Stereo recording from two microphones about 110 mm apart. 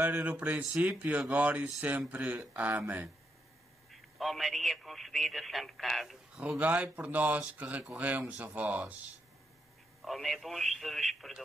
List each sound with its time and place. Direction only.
0.0 s a man's voice: 15° right (ahead or behind)
3.9 s a man's voice: centre (ahead or behind)
10.0 s speech: centre (ahead or behind)